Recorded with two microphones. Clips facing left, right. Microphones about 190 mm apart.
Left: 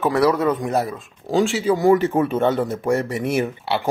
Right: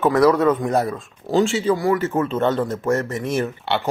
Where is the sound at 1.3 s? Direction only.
5° left (ahead or behind).